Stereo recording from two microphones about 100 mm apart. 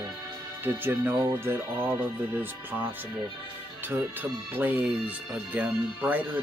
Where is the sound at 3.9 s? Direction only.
20° right (ahead or behind).